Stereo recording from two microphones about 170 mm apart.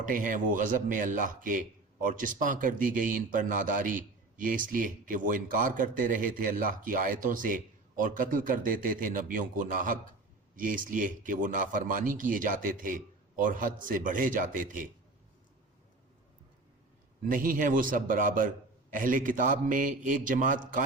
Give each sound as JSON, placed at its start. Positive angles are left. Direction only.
{"t": 0.0, "sound": "speech", "side_deg": -50}
{"t": 17.2, "sound": "speech", "side_deg": -55}